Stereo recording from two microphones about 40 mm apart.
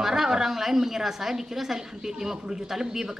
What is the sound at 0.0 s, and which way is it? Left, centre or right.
A woman's voice, centre.